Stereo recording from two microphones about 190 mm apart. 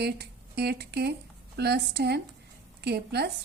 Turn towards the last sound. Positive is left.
turn(degrees=-60)  # may be behind; listen again after turning